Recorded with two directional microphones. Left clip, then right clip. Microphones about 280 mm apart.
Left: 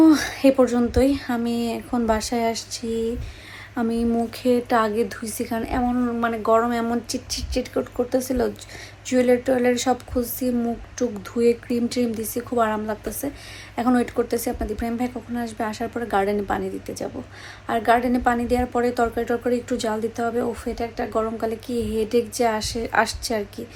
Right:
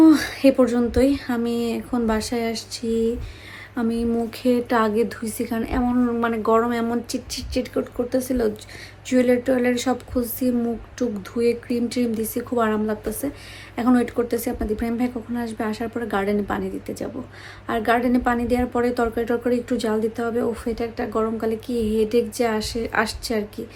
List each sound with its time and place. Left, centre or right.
0.0 s a woman's voice: centre